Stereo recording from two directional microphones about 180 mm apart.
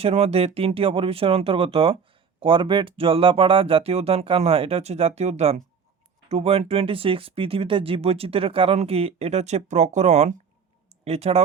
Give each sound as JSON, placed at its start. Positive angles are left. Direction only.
{"t": 0.0, "sound": "speech", "side_deg": -35}